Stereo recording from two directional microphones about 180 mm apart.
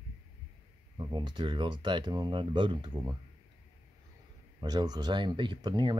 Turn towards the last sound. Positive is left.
turn(degrees=-25)  # may be behind; listen again after turning